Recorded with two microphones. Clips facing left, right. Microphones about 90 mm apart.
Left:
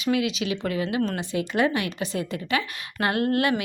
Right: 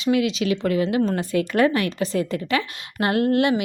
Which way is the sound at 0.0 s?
35° right (ahead or behind).